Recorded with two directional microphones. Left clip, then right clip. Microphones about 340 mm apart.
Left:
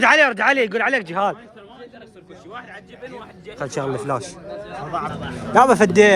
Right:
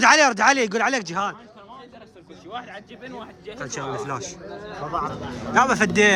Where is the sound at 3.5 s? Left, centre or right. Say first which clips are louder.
Left 5 dB; centre.